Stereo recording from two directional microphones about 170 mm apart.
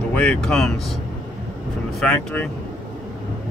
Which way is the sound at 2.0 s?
5° left (ahead or behind).